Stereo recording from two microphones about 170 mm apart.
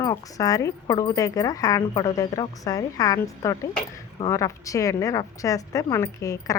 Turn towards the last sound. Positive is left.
turn(degrees=20)  # may be behind; listen again after turning